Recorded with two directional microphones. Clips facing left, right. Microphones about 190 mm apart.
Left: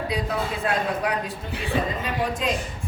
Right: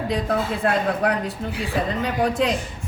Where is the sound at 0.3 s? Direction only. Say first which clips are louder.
Right 4 dB; 60° right (ahead or behind).